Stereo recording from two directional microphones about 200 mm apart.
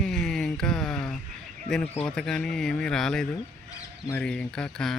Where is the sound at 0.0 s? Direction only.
5° left (ahead or behind).